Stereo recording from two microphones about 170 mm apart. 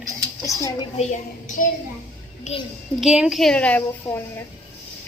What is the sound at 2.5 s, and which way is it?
Speech, 45° left (ahead or behind).